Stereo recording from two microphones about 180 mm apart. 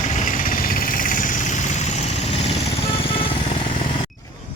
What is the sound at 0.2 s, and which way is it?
Vehicle, 50° left (ahead or behind).